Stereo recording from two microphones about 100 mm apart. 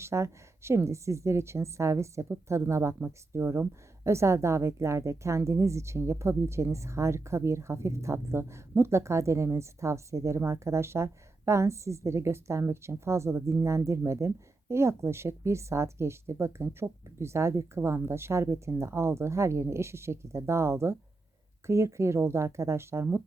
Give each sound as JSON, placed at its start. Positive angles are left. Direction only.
{"t": 0.0, "sound": "a woman's voice", "side_deg": -25}